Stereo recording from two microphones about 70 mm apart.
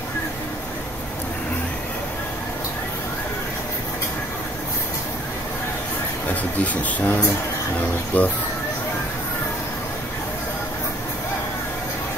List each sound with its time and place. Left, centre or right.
6.2 s speech: left